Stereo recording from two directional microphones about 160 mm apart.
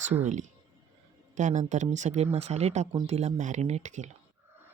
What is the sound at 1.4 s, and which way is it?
Speech, 50° right (ahead or behind).